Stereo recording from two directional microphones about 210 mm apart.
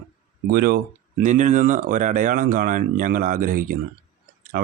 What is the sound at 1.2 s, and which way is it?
Speech, 35° right (ahead or behind).